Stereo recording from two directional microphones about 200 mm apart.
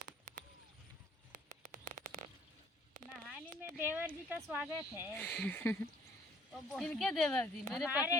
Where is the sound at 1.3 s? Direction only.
45° right (ahead or behind).